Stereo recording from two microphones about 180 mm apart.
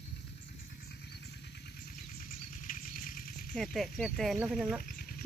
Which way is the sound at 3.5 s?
Centre (ahead or behind).